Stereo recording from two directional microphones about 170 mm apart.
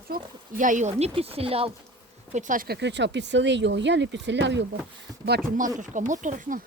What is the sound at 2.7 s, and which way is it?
Speech, 90° right.